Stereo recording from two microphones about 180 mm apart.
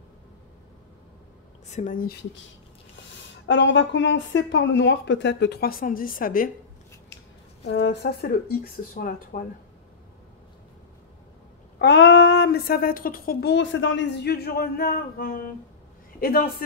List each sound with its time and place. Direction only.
1.7 s speech: 45° left (ahead or behind)
3.4 s speech: 80° left; by 6.5 s 50° left (ahead or behind)
7.6 s speech: 65° left (ahead or behind)
11.8 s speech: 85° left; by 16.6 s 55° left (ahead or behind)